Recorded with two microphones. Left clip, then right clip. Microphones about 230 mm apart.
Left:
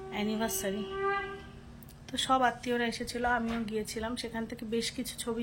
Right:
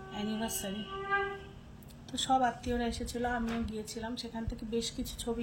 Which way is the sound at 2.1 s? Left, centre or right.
Centre.